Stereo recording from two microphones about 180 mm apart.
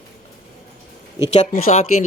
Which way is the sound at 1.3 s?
45° left (ahead or behind).